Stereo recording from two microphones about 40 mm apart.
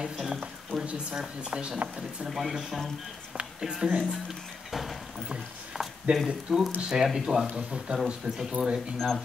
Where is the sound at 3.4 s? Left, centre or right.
Centre.